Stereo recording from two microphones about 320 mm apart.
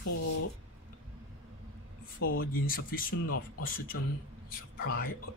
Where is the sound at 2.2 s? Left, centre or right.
Left.